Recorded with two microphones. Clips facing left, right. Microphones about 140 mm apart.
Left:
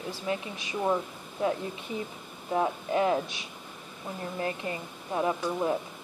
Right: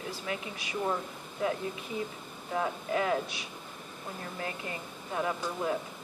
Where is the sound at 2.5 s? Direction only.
25° left (ahead or behind).